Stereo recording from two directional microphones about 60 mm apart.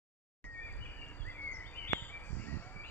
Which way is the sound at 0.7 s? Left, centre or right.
Left.